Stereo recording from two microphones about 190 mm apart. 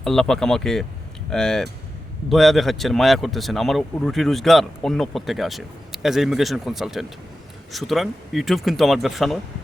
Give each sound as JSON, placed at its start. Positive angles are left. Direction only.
{"t": 0.0, "sound": "speech", "side_deg": 0}